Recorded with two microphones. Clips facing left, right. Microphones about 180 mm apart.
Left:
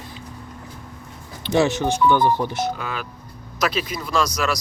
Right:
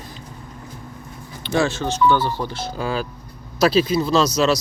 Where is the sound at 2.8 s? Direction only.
30° right (ahead or behind).